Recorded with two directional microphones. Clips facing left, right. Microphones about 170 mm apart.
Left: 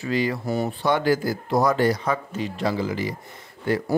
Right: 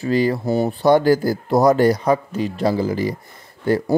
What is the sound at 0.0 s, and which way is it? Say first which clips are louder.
Speech: right 6 dB; 35° right (ahead or behind).